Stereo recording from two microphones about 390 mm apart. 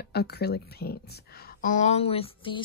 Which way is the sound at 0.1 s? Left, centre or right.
Left.